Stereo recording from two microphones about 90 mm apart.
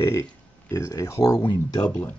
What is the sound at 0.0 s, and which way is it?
Speech, 35° left (ahead or behind).